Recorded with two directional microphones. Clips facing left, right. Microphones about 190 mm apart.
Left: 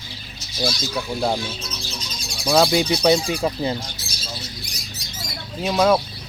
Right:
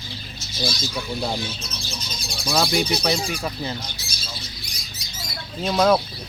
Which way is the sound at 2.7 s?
20° left (ahead or behind).